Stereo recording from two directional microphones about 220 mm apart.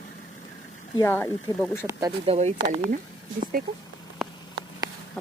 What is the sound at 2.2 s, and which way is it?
Speech, 30° right (ahead or behind).